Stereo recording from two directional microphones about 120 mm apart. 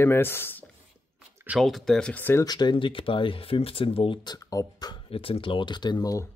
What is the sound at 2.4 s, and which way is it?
Speech, 35° left (ahead or behind).